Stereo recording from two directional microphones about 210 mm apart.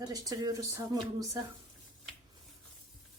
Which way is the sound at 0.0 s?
20° right (ahead or behind).